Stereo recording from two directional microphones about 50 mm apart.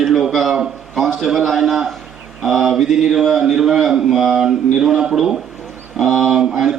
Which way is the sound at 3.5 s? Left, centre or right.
Centre.